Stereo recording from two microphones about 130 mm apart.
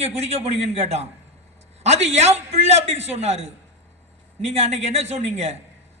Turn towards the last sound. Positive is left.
turn(degrees=-55)  # may be behind; listen again after turning